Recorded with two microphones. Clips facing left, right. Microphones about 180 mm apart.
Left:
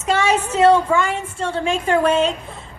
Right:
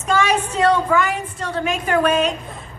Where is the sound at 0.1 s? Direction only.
25° left (ahead or behind).